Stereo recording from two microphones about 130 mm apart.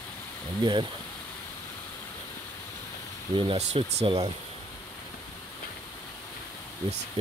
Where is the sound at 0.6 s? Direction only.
35° right (ahead or behind).